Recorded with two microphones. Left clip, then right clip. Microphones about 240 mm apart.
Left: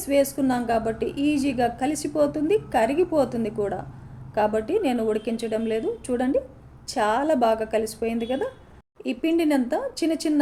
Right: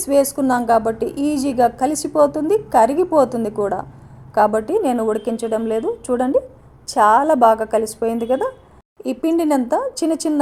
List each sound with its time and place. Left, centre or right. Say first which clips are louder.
0.0 s a woman's voice: right 5 dB; right